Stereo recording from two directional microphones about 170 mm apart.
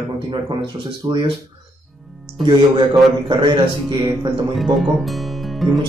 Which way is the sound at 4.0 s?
30° right (ahead or behind).